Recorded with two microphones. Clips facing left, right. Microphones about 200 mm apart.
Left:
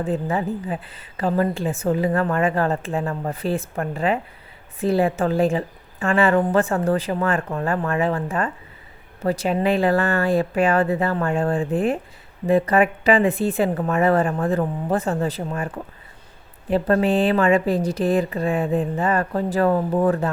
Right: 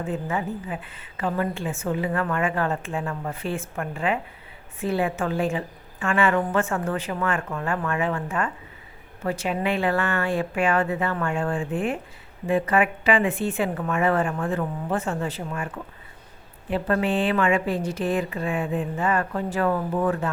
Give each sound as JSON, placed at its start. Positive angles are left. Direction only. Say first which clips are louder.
{"t": 0.0, "sound": "a woman's voice", "louder": "left 4 dB", "side_deg": 35}